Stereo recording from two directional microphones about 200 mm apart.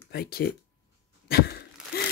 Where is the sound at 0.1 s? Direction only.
50° left (ahead or behind).